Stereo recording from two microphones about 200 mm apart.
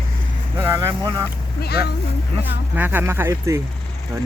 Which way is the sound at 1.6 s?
55° left (ahead or behind).